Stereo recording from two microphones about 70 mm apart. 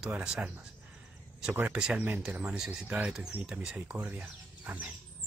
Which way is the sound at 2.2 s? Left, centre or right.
Centre.